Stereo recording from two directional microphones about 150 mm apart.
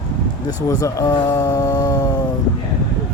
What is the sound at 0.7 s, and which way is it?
Speech, 20° left (ahead or behind).